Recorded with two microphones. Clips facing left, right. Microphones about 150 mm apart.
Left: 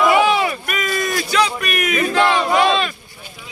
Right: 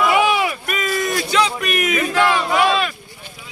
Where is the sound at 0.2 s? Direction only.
10° right (ahead or behind).